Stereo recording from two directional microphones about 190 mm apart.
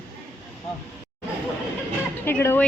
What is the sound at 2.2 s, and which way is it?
Speech, 10° left (ahead or behind).